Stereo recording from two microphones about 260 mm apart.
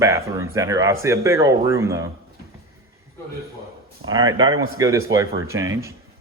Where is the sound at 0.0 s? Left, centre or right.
Centre.